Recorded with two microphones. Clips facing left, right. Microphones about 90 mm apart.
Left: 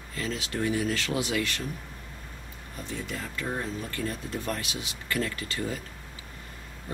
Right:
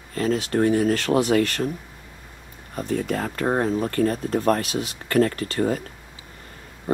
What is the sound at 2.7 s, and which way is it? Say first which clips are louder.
Speech: right 11 dB; 50° right (ahead or behind).